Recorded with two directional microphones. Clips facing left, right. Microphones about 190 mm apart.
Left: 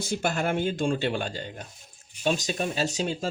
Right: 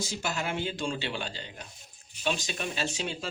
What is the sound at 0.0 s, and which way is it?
Speech, 55° left (ahead or behind).